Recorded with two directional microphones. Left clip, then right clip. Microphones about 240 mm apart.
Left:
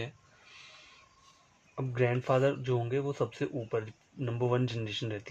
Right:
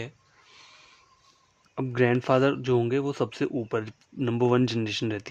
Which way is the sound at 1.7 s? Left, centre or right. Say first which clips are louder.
Right 7 dB; right.